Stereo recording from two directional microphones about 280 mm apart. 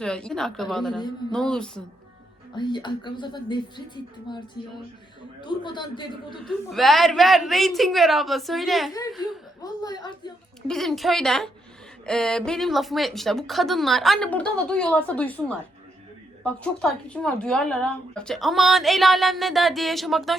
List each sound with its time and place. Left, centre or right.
0.0 s speech: centre
2.6 s a woman's voice: centre
6.4 s speech: centre
8.9 s a woman's voice: centre
10.7 s speech: centre